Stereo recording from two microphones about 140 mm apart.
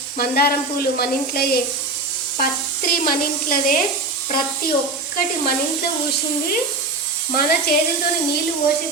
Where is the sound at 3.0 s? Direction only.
85° left.